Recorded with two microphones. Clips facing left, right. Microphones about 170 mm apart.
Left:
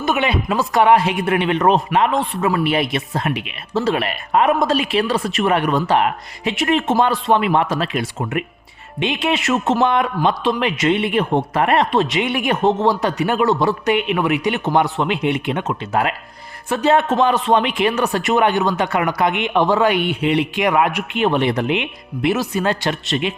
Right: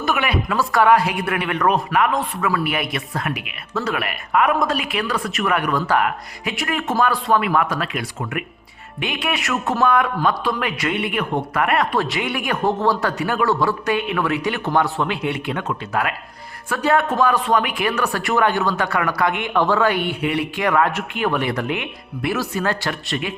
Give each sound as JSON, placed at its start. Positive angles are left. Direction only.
{"t": 0.0, "sound": "speech", "side_deg": 20}